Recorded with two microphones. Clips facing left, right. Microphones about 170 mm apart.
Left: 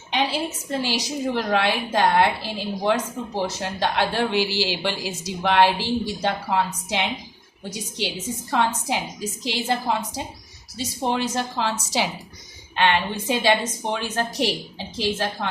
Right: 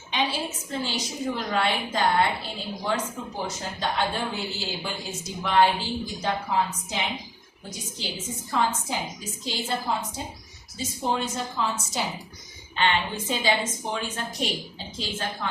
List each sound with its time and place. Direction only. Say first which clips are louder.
0.7 s a woman's voice: left 6 dB; 75° left (ahead or behind)
10.8 s a woman's voice: left 3 dB; 70° left (ahead or behind); by 12.1 s 90° left
12.7 s a woman's voice: left 4 dB; 70° left (ahead or behind)